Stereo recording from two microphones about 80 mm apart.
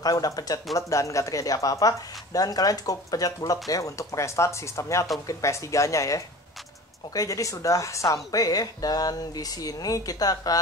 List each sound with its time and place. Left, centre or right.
0.0 s speech: left